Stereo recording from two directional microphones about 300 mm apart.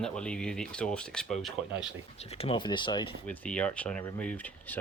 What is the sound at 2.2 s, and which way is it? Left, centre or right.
Speech, centre.